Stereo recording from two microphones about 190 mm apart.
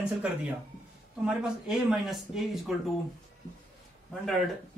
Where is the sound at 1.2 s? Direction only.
5° right (ahead or behind).